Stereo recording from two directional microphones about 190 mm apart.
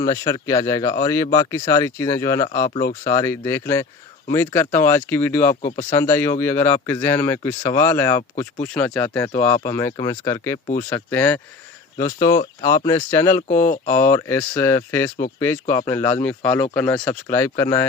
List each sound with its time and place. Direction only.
0.0 s speech: 20° left (ahead or behind)